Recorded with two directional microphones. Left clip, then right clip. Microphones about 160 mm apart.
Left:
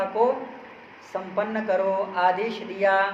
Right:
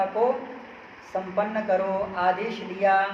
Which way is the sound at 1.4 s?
70° left (ahead or behind).